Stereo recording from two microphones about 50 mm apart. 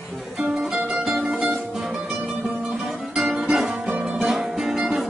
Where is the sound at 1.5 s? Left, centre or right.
Centre.